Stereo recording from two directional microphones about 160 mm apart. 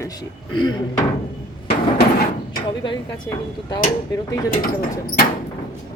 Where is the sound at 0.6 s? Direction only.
25° left (ahead or behind).